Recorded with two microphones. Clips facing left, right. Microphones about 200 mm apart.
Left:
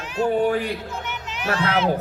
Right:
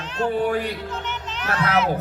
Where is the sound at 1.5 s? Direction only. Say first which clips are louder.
Even; 30° left (ahead or behind).